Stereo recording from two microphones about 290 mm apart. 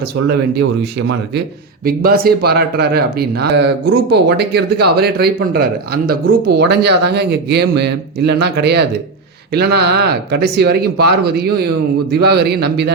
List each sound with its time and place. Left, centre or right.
1.8 s speech: right